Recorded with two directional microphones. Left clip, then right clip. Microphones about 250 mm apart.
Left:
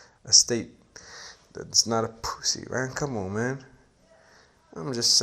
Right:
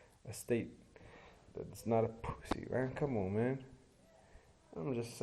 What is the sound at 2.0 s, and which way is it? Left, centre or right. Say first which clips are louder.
Speech: left 8 dB; left.